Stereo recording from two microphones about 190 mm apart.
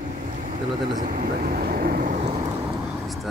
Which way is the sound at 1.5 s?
50° right (ahead or behind).